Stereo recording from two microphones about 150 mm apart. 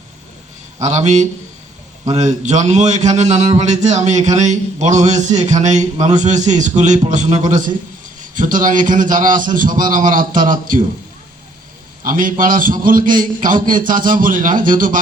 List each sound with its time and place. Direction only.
0.8 s a man's voice: 50° right (ahead or behind)
12.0 s a man's voice: 65° right (ahead or behind)